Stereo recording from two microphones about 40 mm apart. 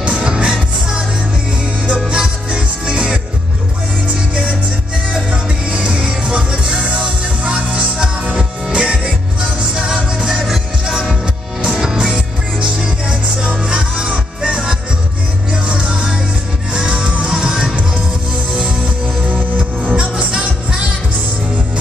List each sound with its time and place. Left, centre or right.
0.0 s music: right
2.0 s music: right
5.1 s music: right
10.1 s music: centre
11.6 s music: centre
19.5 s music: right